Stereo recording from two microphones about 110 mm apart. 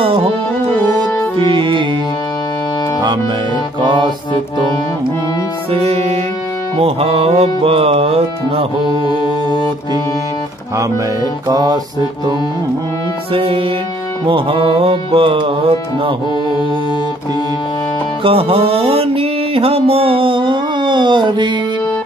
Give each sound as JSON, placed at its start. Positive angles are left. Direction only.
{"t": 0.0, "sound": "music", "side_deg": -55}
{"t": 0.7, "sound": "music", "side_deg": 15}
{"t": 1.4, "sound": "music", "side_deg": -50}
{"t": 3.8, "sound": "music", "side_deg": -45}
{"t": 5.7, "sound": "music", "side_deg": -70}
{"t": 11.4, "sound": "music", "side_deg": -35}
{"t": 13.3, "sound": "music", "side_deg": -55}
{"t": 18.2, "sound": "music", "side_deg": -60}